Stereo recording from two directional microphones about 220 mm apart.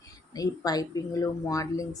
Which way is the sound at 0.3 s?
15° left (ahead or behind).